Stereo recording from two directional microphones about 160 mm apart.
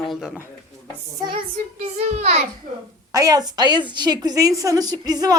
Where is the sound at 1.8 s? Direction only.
40° right (ahead or behind).